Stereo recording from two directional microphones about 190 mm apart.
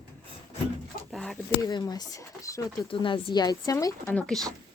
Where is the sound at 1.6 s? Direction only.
20° left (ahead or behind).